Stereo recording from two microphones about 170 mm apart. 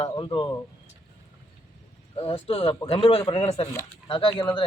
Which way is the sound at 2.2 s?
35° left (ahead or behind).